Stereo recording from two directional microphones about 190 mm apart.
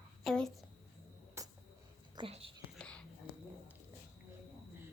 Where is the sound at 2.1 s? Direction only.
30° right (ahead or behind).